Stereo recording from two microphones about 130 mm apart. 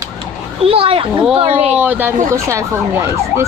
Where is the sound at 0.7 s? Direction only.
45° right (ahead or behind).